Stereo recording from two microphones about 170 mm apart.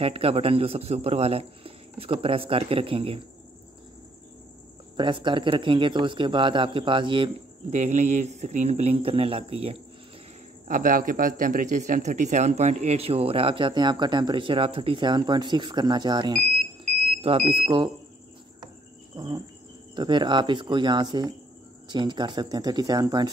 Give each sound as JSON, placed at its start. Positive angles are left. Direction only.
{"t": 0.0, "sound": "a man's voice", "side_deg": -35}
{"t": 4.9, "sound": "a man's voice", "side_deg": -30}
{"t": 7.7, "sound": "a man's voice", "side_deg": -45}
{"t": 10.7, "sound": "a man's voice", "side_deg": -55}
{"t": 19.1, "sound": "cricket", "side_deg": -25}
{"t": 20.0, "sound": "a man's voice", "side_deg": -25}